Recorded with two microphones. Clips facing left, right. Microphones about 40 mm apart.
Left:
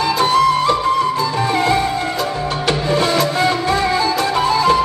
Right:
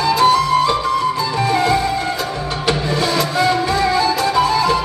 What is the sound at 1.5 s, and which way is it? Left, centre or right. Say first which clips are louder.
Music: right 1 dB; left.